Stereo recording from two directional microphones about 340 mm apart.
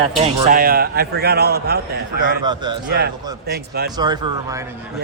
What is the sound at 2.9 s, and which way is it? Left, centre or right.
Speech, right.